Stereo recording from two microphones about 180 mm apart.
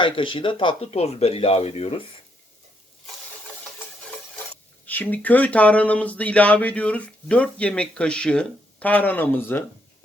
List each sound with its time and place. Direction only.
0.0 s speech: 30° left (ahead or behind)
4.9 s speech: 10° left (ahead or behind)